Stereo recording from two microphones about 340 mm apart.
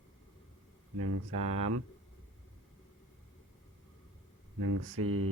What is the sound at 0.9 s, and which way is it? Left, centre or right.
Speech, right.